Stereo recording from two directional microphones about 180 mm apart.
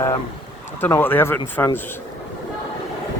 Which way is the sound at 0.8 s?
10° left (ahead or behind).